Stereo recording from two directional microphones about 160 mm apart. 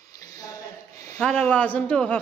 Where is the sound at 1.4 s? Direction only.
10° left (ahead or behind).